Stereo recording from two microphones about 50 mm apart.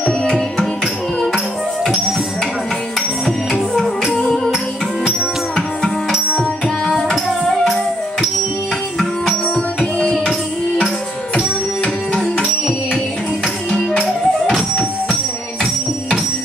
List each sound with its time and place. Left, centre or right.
0.0 s music: centre
4.1 s music: centre
6.9 s music: centre
9.8 s music: centre
11.3 s music: centre
13.7 s music: centre
14.0 s music: centre